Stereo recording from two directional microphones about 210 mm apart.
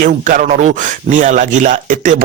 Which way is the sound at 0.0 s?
40° right (ahead or behind).